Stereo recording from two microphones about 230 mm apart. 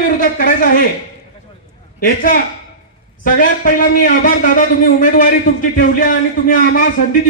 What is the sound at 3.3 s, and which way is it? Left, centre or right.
A man's voice, left.